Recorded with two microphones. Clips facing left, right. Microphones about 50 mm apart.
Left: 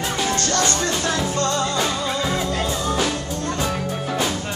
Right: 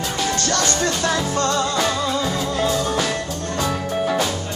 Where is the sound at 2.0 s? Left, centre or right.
Left.